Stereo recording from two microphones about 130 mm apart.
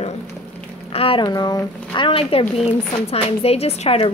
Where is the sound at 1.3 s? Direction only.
30° left (ahead or behind).